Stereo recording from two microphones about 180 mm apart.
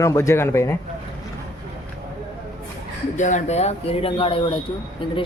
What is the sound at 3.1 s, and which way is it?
Speech, 40° left (ahead or behind).